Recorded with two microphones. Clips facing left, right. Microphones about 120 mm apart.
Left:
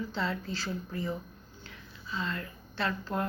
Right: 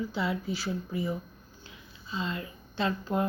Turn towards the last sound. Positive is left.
turn(degrees=-15)  # may be behind; listen again after turning